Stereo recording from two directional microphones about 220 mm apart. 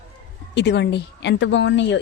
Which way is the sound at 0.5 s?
50° left (ahead or behind).